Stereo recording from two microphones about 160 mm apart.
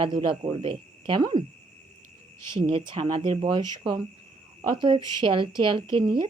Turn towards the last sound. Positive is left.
turn(degrees=-30)  # may be behind; listen again after turning